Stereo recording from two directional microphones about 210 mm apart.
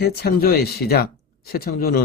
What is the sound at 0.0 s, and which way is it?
Speech, 50° left (ahead or behind).